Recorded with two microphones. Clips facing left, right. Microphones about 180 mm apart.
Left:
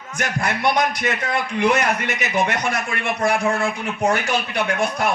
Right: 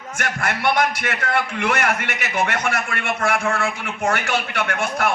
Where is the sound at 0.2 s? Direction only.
15° left (ahead or behind).